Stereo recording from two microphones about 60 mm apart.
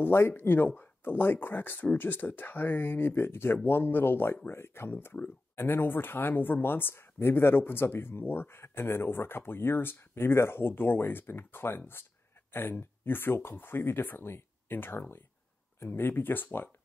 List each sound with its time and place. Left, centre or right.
0.0 s speech: left